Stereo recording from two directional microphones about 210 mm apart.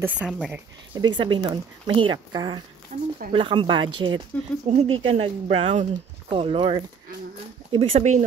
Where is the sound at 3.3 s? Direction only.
25° right (ahead or behind).